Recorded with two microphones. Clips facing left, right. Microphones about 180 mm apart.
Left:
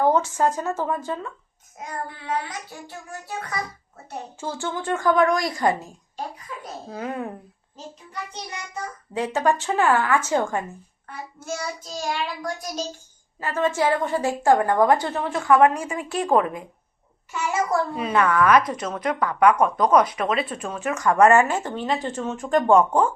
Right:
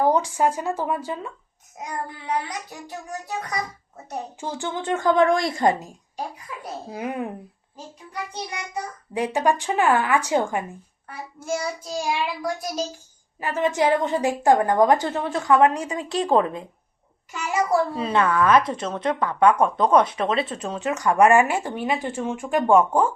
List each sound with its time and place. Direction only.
0.0 s a woman's voice: 15° right (ahead or behind)
6.9 s speech: 15° right (ahead or behind)
9.1 s a woman's voice: 15° right (ahead or behind)
17.7 s a woman's voice: 30° right (ahead or behind); by 23.0 s 10° right (ahead or behind)